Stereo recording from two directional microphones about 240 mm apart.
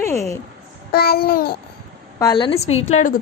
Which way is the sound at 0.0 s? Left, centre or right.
Centre.